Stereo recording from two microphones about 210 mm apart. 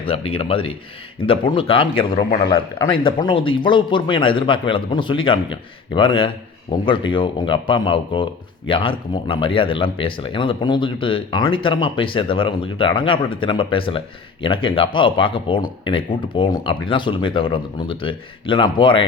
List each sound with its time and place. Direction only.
0.0 s a man's voice: 25° left (ahead or behind)